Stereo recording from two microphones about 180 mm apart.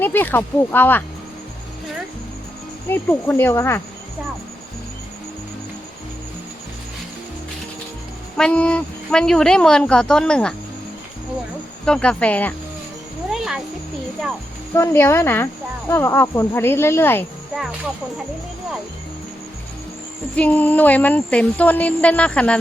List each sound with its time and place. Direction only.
0.0 s speech: 10° left (ahead or behind)
2.9 s speech: 10° left (ahead or behind)
8.4 s speech: 5° left (ahead or behind)
11.9 s speech: 5° left (ahead or behind)
13.3 s a sound: 5° right (ahead or behind)
14.7 s speech: 15° left (ahead or behind)
20.3 s speech: 10° left (ahead or behind)